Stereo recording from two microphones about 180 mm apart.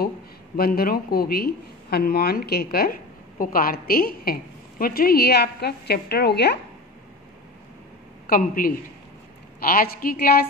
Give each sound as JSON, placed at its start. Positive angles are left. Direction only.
{"t": 0.6, "sound": "speech", "side_deg": 55}
{"t": 8.3, "sound": "speech", "side_deg": 50}